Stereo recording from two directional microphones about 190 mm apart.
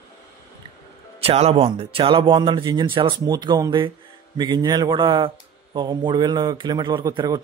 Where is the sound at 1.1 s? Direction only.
30° right (ahead or behind).